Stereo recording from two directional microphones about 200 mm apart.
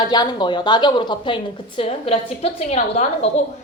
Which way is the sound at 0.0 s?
20° left (ahead or behind).